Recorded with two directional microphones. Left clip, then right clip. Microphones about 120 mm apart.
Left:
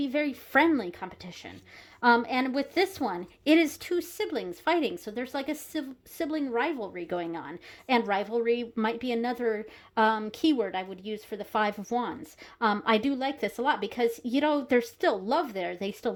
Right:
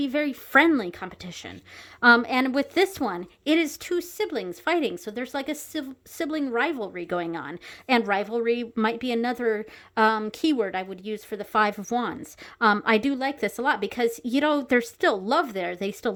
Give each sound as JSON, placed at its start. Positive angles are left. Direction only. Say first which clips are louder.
{"t": 0.0, "sound": "a woman's voice", "louder": "right 3 dB", "side_deg": -40}
{"t": 3.4, "sound": "speech", "louder": "even", "side_deg": 0}
{"t": 3.8, "sound": "a woman's voice", "louder": "right 3 dB", "side_deg": -25}